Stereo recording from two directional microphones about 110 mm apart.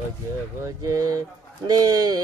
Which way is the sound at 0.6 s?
30° right (ahead or behind).